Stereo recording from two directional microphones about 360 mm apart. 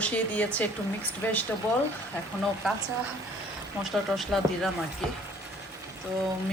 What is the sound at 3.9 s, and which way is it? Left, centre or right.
Speech, centre.